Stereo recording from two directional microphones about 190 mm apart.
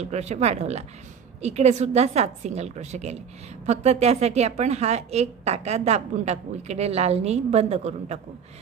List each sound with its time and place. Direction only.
0.0 s a woman's voice: 35° right (ahead or behind)